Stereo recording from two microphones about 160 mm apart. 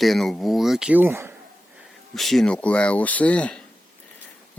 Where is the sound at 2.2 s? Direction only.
Centre (ahead or behind).